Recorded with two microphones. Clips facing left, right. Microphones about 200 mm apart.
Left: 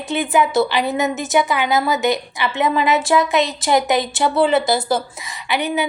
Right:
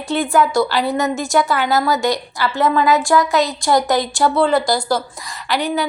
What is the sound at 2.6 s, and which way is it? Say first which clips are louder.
Speech: right 2 dB; 20° left (ahead or behind).